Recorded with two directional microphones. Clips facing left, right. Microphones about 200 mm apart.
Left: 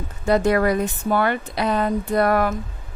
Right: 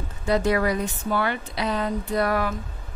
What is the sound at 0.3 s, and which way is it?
A woman's voice, 50° left (ahead or behind).